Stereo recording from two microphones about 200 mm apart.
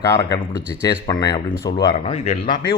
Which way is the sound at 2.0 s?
35° left (ahead or behind).